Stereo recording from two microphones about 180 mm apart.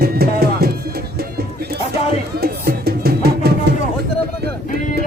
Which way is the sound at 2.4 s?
60° right (ahead or behind).